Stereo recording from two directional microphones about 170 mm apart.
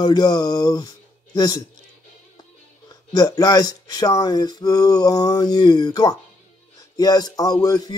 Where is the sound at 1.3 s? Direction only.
20° left (ahead or behind).